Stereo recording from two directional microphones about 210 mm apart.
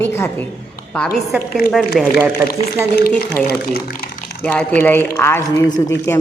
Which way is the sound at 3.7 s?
45° left (ahead or behind).